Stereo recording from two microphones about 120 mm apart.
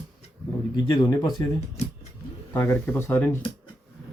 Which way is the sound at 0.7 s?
35° left (ahead or behind).